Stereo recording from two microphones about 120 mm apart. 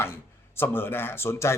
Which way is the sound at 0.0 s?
20° left (ahead or behind).